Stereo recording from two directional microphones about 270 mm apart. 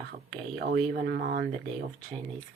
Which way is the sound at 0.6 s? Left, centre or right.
Right.